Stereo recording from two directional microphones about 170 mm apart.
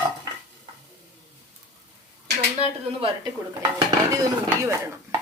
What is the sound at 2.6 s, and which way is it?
Speech, 35° left (ahead or behind).